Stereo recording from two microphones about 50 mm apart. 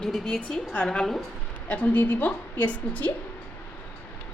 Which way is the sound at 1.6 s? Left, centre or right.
Left.